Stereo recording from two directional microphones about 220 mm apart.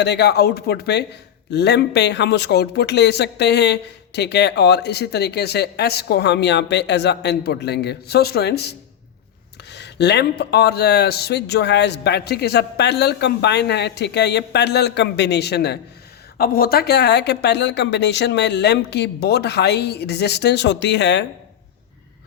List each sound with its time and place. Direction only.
0.0 s a man's voice: 50° left (ahead or behind)